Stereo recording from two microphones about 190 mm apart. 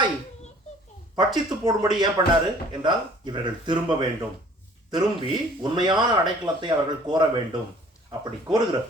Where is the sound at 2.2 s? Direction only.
20° right (ahead or behind).